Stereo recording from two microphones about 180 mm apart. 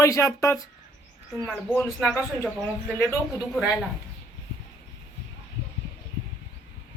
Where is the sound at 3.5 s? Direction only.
5° right (ahead or behind).